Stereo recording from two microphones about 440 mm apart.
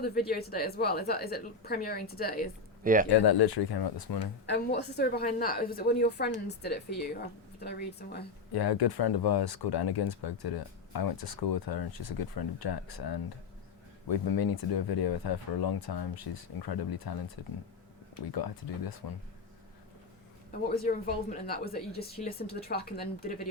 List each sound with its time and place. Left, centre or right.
0.0 s speech: left
2.8 s speech: centre
3.2 s speech: left
4.4 s speech: left
8.5 s speech: left
20.5 s speech: centre